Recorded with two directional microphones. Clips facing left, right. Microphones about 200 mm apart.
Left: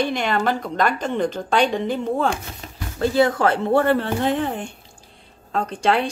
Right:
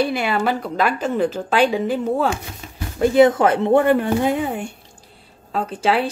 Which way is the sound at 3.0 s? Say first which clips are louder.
Right 4 dB; 20° right (ahead or behind).